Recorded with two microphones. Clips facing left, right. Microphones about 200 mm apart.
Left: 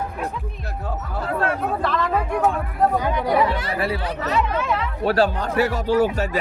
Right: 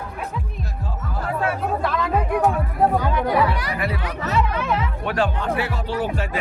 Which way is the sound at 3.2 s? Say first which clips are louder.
Even; 25° left (ahead or behind).